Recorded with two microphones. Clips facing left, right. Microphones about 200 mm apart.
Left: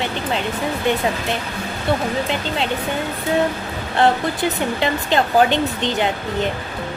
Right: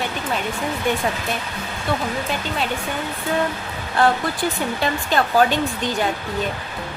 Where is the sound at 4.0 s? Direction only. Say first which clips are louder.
Left 2 dB; 20° left (ahead or behind).